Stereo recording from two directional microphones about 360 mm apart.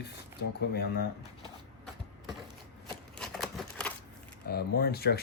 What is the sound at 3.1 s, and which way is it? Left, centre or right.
Scissors, centre.